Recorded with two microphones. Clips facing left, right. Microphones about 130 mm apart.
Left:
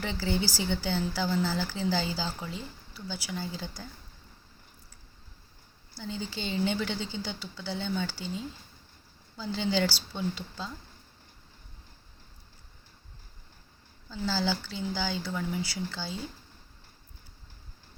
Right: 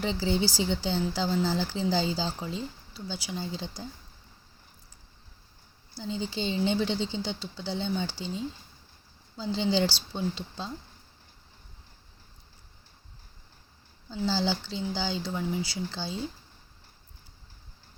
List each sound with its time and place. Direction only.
0.0 s speech: 25° right (ahead or behind)
6.0 s speech: 25° right (ahead or behind)
14.1 s speech: 25° right (ahead or behind)